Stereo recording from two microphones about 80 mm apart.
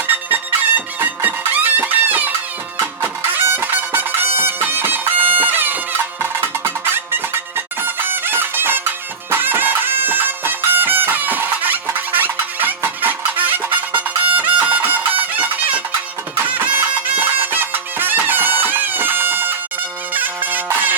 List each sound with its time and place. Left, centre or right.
0.3 s music: right